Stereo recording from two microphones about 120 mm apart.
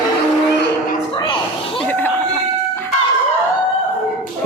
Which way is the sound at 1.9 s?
15° left (ahead or behind).